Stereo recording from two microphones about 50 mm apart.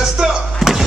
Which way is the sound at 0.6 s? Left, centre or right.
Centre.